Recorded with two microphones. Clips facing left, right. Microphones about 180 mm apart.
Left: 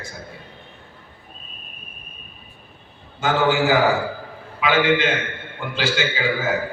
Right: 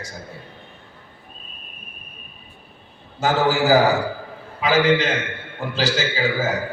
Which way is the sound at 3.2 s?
40° right (ahead or behind).